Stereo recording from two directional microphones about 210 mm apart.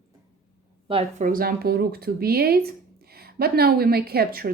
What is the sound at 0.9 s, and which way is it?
Speech, 30° right (ahead or behind).